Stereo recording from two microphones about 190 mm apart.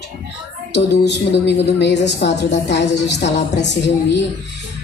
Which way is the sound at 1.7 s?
65° left (ahead or behind).